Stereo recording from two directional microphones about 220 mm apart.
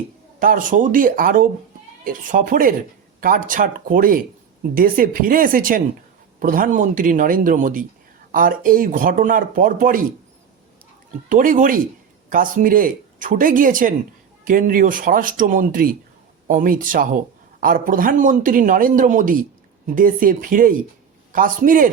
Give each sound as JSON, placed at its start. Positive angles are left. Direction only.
{"t": 0.3, "sound": "speech", "side_deg": -40}
{"t": 11.3, "sound": "speech", "side_deg": -35}